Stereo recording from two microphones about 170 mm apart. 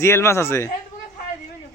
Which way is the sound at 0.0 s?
15° left (ahead or behind).